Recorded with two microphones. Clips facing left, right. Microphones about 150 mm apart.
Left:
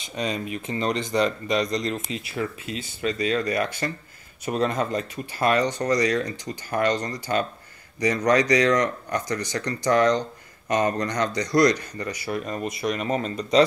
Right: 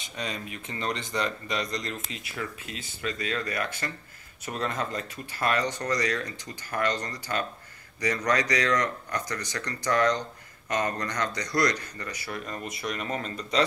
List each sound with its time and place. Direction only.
0.1 s speech: 20° left (ahead or behind)